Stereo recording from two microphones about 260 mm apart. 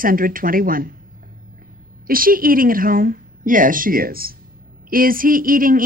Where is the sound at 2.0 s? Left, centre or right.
Right.